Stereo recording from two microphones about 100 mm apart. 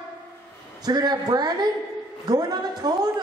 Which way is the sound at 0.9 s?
40° right (ahead or behind).